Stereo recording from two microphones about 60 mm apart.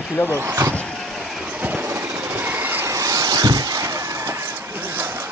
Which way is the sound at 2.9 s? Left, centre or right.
Right.